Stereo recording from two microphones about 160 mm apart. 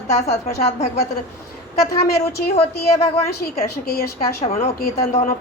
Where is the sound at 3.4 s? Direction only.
75° left (ahead or behind).